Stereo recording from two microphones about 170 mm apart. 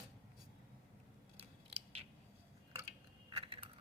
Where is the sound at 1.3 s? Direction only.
35° right (ahead or behind).